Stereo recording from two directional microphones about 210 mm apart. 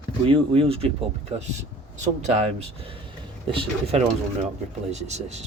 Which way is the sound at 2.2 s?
30° right (ahead or behind).